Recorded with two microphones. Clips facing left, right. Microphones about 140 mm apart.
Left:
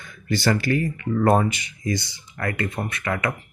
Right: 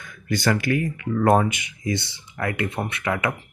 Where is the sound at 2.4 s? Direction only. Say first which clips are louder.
Right 1 dB; 15° right (ahead or behind).